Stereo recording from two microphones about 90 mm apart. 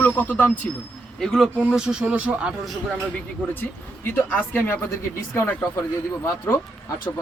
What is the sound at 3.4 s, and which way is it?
Speech, 15° left (ahead or behind).